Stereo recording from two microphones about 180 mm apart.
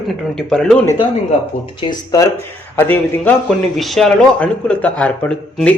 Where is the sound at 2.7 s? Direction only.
10° left (ahead or behind).